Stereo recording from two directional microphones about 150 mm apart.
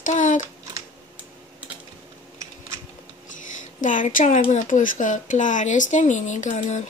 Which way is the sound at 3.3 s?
60° left (ahead or behind).